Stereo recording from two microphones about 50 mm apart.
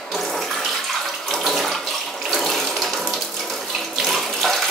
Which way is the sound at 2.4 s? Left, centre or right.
Centre.